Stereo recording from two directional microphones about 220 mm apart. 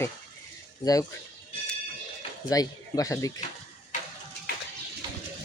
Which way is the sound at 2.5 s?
15° left (ahead or behind).